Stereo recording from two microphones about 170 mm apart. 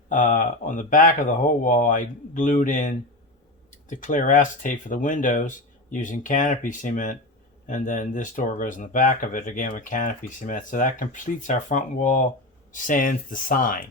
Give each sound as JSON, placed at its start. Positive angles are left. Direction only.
{"t": 0.1, "sound": "speech", "side_deg": 50}